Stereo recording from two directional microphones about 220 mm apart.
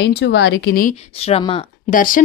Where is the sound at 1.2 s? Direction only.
25° left (ahead or behind).